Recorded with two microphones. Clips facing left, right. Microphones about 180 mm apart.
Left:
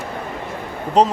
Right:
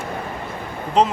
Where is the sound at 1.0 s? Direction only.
40° left (ahead or behind).